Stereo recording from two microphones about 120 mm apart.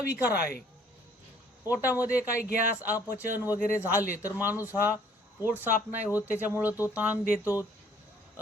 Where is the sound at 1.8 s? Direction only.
15° right (ahead or behind).